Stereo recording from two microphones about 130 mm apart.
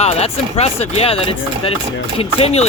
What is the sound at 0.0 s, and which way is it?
Speech, 55° left (ahead or behind).